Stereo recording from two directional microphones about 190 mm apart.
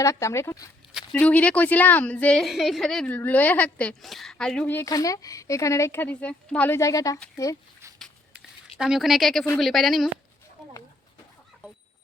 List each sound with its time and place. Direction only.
0.0 s a woman's voice: 15° left (ahead or behind)
7.9 s a sound: centre (ahead or behind)
9.6 s a woman's voice: centre (ahead or behind)